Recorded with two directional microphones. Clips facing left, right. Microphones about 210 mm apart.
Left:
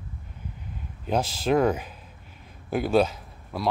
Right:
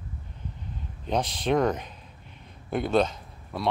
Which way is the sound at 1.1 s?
5° left (ahead or behind).